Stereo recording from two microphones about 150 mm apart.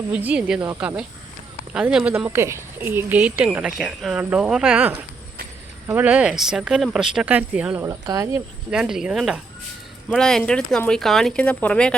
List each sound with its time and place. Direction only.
0.1 s speech: 10° right (ahead or behind)
7.8 s speech: 25° right (ahead or behind)
8.7 s speech: 5° right (ahead or behind)